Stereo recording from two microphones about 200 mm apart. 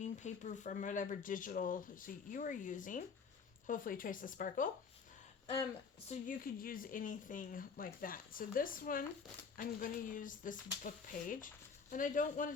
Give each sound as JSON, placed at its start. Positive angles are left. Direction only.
{"t": 0.0, "sound": "speech", "side_deg": 35}
{"t": 6.1, "sound": "speech", "side_deg": 40}